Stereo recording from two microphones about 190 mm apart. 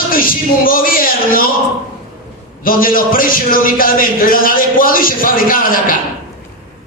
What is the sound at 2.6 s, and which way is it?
A man's voice, 50° left (ahead or behind).